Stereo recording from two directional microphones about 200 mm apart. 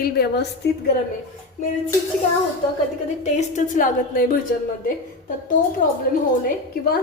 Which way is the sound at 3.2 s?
35° left (ahead or behind).